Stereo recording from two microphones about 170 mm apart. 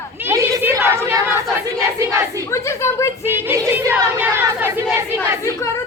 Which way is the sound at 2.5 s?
15° left (ahead or behind).